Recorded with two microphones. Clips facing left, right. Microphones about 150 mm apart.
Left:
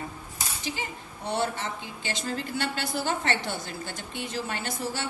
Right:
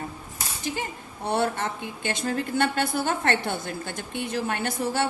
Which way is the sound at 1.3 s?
55° right (ahead or behind).